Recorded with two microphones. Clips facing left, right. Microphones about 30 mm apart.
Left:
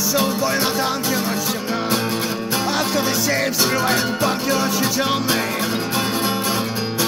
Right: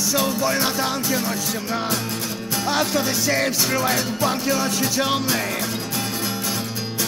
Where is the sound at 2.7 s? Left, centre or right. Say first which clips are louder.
Right 1 dB; centre.